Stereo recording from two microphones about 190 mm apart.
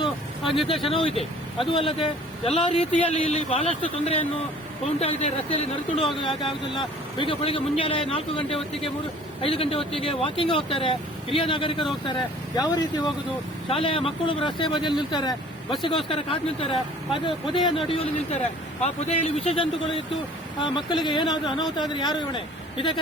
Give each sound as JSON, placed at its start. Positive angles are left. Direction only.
{"t": 0.9, "sound": "a man's voice", "side_deg": 30}